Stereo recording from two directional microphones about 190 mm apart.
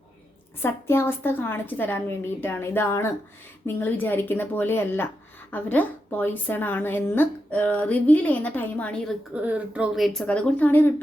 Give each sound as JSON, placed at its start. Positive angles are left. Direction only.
{"t": 0.6, "sound": "a woman's voice", "side_deg": 10}
{"t": 9.3, "sound": "speech", "side_deg": -10}